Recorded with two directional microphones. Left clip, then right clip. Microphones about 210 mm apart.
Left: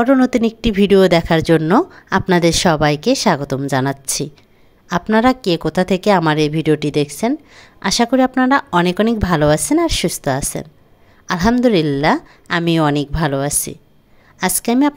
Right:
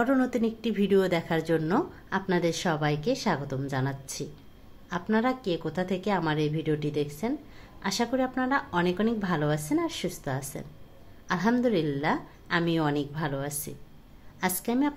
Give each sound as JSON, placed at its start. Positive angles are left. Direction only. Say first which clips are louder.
{"t": 0.0, "sound": "a woman's voice", "louder": "left 12 dB", "side_deg": 45}